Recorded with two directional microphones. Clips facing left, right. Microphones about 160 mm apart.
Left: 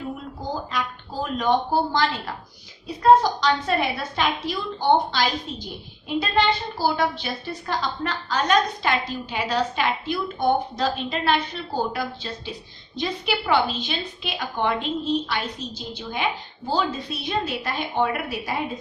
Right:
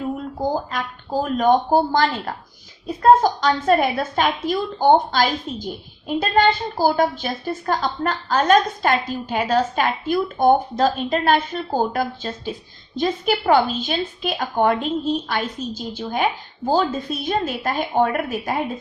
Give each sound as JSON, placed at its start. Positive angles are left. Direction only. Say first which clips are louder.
{"t": 0.5, "sound": "a woman's voice", "louder": "right 3 dB", "side_deg": -50}